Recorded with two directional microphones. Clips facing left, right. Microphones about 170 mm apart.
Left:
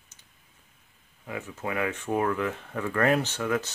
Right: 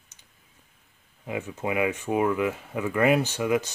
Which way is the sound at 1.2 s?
20° right (ahead or behind).